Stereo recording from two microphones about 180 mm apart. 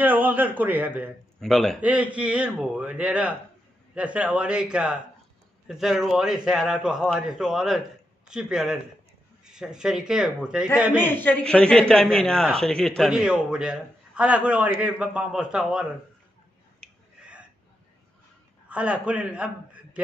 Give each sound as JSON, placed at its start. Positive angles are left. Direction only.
{"t": 0.0, "sound": "a man's voice", "side_deg": -10}
{"t": 1.4, "sound": "a man's voice", "side_deg": 5}
{"t": 1.8, "sound": "a man's voice", "side_deg": -5}
{"t": 11.1, "sound": "a man's voice", "side_deg": 10}
{"t": 18.7, "sound": "a man's voice", "side_deg": -5}